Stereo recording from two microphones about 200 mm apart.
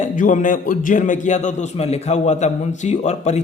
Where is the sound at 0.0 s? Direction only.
40° left (ahead or behind).